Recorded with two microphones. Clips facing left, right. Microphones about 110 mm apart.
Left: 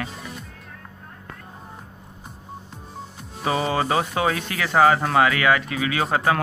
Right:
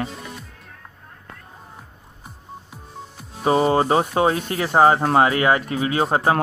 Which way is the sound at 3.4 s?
35° right (ahead or behind).